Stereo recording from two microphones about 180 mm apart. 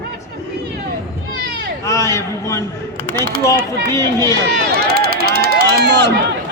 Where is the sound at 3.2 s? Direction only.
25° left (ahead or behind).